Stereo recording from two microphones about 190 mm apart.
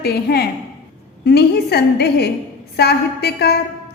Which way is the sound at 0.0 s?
55° left (ahead or behind).